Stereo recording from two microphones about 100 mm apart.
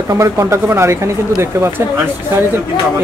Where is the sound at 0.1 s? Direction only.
35° right (ahead or behind).